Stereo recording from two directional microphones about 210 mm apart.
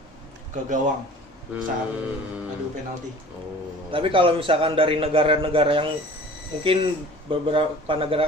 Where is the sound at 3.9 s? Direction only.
25° right (ahead or behind).